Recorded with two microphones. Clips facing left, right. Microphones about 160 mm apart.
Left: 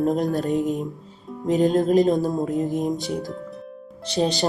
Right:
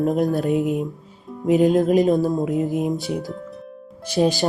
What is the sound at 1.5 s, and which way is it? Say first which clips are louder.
Speech: right 3 dB; 5° right (ahead or behind).